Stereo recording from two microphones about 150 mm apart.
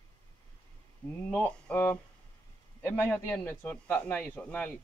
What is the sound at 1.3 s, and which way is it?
A man's voice, 5° left (ahead or behind).